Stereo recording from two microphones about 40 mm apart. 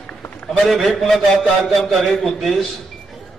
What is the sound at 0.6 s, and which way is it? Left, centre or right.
A man's voice, centre.